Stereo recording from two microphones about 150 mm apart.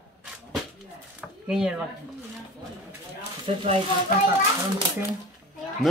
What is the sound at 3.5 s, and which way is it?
Speech, 40° right (ahead or behind).